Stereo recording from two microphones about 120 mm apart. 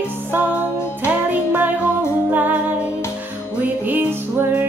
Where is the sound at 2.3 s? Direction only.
15° right (ahead or behind).